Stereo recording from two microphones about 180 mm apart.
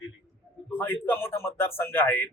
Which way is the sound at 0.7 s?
10° left (ahead or behind).